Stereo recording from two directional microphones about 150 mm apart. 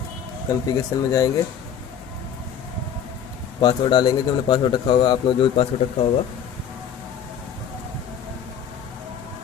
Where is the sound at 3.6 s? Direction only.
30° left (ahead or behind).